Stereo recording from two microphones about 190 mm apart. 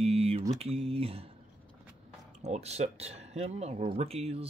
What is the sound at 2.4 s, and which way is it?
Speech, 35° right (ahead or behind).